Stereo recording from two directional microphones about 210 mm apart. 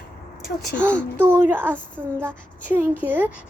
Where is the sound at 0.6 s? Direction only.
Centre (ahead or behind).